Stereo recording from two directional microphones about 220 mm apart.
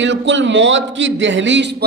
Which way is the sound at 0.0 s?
55° right (ahead or behind).